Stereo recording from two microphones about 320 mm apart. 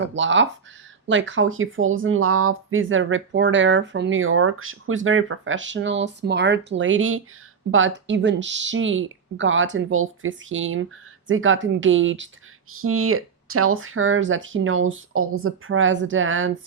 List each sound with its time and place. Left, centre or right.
0.0 s speech: right